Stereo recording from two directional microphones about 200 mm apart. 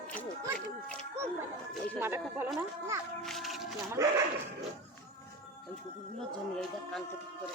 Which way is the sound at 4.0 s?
15° right (ahead or behind).